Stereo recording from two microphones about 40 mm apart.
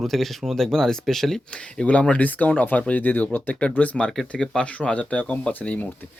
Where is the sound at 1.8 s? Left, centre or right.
Left.